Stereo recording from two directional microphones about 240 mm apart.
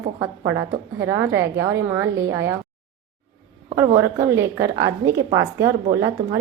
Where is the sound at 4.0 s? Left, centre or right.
Centre.